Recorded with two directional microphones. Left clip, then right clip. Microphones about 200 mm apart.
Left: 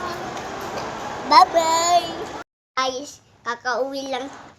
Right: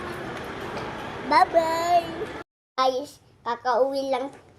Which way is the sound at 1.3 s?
5° right (ahead or behind).